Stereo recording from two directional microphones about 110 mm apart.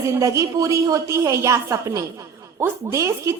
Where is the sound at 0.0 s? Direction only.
30° right (ahead or behind).